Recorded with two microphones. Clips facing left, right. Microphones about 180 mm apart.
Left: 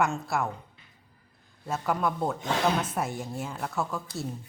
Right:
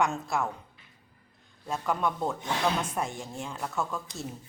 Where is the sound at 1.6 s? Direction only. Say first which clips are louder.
Left 1 dB; 5° left (ahead or behind).